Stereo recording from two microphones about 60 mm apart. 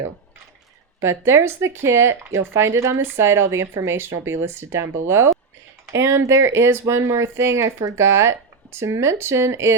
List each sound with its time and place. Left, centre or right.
0.9 s speech: right